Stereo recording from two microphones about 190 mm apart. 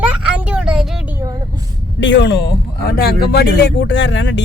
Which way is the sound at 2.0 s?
70° left (ahead or behind).